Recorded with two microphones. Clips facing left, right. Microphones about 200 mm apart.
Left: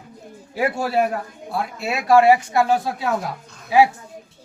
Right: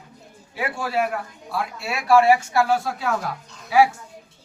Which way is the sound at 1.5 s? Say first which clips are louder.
Left 3 dB; 20° left (ahead or behind).